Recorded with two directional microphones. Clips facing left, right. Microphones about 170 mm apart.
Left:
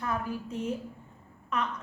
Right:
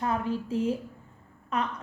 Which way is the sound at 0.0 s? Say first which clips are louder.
Right 4 dB; 30° right (ahead or behind).